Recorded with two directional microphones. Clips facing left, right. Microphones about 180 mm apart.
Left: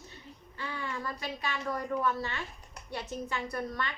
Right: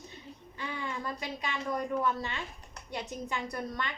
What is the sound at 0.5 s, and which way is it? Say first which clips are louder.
A woman's voice: even; 15° right (ahead or behind).